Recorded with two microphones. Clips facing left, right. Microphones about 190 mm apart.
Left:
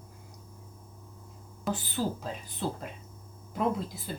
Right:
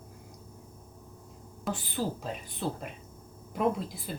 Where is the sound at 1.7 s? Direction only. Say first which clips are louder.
Left 2 dB; centre (ahead or behind).